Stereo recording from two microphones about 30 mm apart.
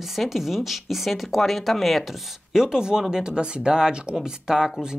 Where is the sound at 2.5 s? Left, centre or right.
Right.